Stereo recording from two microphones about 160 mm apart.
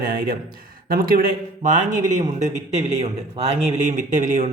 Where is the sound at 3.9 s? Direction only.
50° right (ahead or behind).